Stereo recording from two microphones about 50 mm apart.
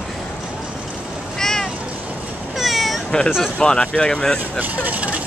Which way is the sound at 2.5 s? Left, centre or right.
Centre.